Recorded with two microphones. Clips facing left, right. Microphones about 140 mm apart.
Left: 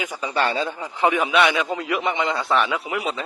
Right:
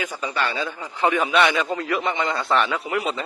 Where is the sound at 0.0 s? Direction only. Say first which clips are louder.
Even; 15° left (ahead or behind).